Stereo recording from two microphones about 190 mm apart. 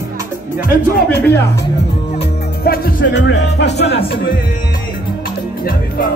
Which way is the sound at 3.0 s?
70° left (ahead or behind).